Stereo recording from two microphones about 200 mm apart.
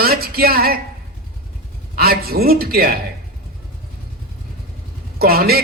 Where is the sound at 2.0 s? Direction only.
50° right (ahead or behind).